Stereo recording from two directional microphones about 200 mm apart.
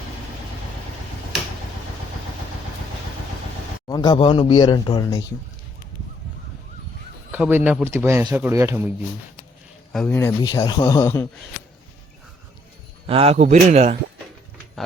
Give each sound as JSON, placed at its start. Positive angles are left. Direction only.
{"t": 3.8, "sound": "speech", "side_deg": 20}
{"t": 7.3, "sound": "a man's voice", "side_deg": -10}
{"t": 9.9, "sound": "a man's voice", "side_deg": 5}
{"t": 13.1, "sound": "a man's voice", "side_deg": -30}